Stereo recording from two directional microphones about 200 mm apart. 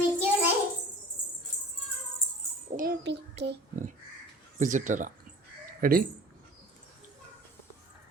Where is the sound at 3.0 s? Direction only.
60° right (ahead or behind).